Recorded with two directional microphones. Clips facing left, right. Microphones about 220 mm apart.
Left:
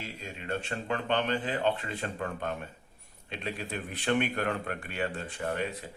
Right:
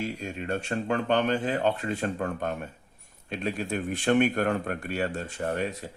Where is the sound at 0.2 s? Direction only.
45° right (ahead or behind).